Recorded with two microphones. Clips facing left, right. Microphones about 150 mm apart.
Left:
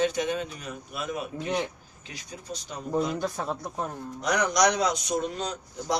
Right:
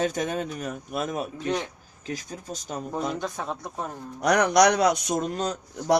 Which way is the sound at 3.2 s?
5° left (ahead or behind).